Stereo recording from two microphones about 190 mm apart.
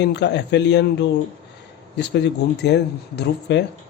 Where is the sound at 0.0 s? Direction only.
65° left (ahead or behind).